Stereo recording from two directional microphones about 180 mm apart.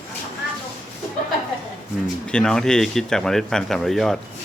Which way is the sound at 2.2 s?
5° left (ahead or behind).